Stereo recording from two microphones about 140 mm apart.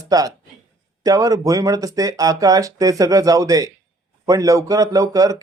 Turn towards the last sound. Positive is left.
turn(degrees=-25)  # may be behind; listen again after turning